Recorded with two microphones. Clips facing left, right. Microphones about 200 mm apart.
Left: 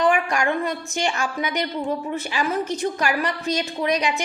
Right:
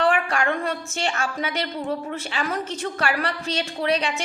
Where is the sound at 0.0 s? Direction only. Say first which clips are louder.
Left 1 dB; 15° left (ahead or behind).